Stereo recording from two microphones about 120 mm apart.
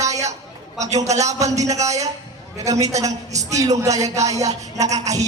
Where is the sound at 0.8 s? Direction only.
70° right (ahead or behind).